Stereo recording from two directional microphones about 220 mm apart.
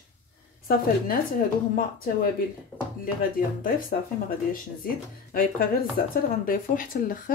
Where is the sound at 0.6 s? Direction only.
40° left (ahead or behind).